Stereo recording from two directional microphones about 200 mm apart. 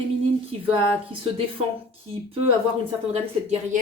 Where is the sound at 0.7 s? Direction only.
25° right (ahead or behind).